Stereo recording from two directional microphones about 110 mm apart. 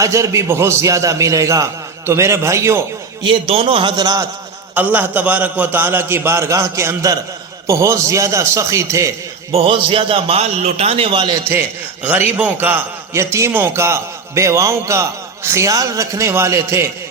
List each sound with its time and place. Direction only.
0.0 s a man's voice: 30° right (ahead or behind)
3.2 s a man's voice: 60° right (ahead or behind); by 4.3 s 35° right (ahead or behind)
4.7 s a man's voice: 15° right (ahead or behind)
9.5 s a man's voice: 55° right (ahead or behind)
10.4 s a man's voice: 75° right (ahead or behind); by 11.3 s 45° right (ahead or behind)
12.0 s a man's voice: 15° right (ahead or behind)